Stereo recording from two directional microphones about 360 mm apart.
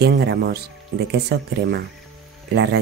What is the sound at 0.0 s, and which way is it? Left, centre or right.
Speech, right.